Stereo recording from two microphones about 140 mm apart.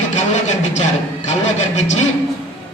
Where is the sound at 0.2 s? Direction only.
55° left (ahead or behind).